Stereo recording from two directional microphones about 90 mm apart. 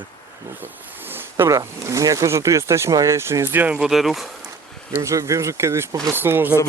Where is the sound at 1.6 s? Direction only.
35° right (ahead or behind); by 3.8 s 20° right (ahead or behind).